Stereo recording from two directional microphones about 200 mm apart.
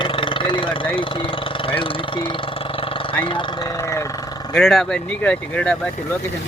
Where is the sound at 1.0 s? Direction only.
25° left (ahead or behind).